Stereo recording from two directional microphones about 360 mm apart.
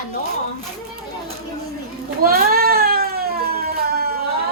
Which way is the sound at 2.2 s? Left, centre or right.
Right.